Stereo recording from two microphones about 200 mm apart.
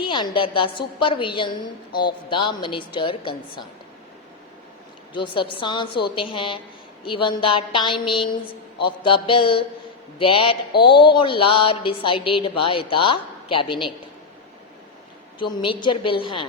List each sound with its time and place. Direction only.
0.0 s a woman's voice: 25° left (ahead or behind)
5.1 s a woman's voice: 25° left (ahead or behind)
15.4 s a woman's voice: 25° left (ahead or behind)